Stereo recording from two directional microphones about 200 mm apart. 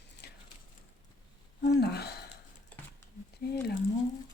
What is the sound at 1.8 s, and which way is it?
Speech, 55° left (ahead or behind).